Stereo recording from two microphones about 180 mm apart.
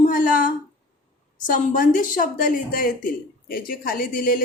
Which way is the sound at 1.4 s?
45° left (ahead or behind).